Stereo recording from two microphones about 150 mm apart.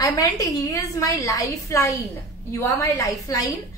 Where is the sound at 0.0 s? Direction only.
25° left (ahead or behind).